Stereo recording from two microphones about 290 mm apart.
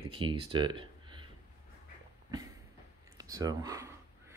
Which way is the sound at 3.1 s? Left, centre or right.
Centre.